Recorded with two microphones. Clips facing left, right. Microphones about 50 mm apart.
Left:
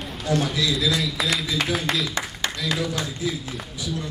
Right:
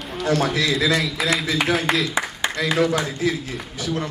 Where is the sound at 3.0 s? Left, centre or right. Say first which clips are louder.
Right 5 dB; right.